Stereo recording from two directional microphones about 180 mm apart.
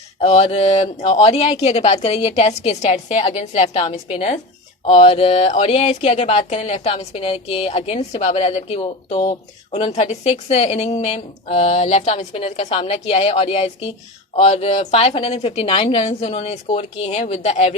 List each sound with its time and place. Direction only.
0.2 s speech: 35° left (ahead or behind)